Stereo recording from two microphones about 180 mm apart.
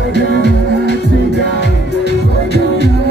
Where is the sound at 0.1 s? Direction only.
65° right (ahead or behind).